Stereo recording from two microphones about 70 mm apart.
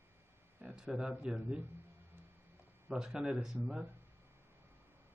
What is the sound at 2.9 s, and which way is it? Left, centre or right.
A man's voice, centre.